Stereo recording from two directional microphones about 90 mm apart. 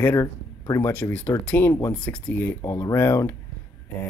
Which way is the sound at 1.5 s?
20° left (ahead or behind).